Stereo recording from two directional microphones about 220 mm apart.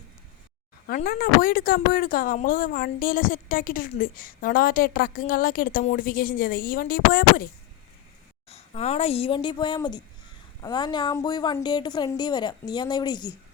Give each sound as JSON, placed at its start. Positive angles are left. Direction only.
{"t": 0.9, "sound": "speech", "side_deg": 40}
{"t": 8.4, "sound": "a woman's voice", "side_deg": 30}